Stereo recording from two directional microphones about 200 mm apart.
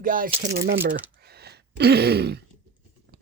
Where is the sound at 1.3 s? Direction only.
55° right (ahead or behind).